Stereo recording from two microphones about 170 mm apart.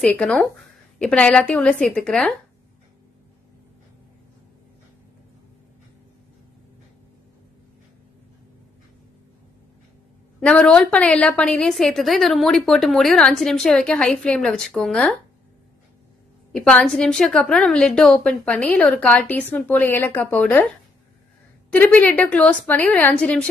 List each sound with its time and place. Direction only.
0.0 s a woman's voice: 5° left (ahead or behind)
10.4 s a woman's voice: 5° left (ahead or behind)
16.5 s a woman's voice: 5° left (ahead or behind)
21.7 s a woman's voice: 10° left (ahead or behind)